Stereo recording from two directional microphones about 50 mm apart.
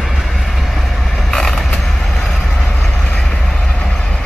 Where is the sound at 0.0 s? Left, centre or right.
Centre.